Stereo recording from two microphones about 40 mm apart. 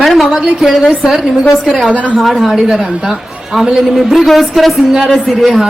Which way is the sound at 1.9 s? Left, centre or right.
Right.